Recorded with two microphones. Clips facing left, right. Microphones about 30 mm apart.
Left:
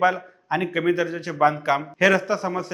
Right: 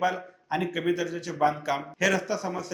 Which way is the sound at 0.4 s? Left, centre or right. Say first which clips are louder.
Left 5 dB; left.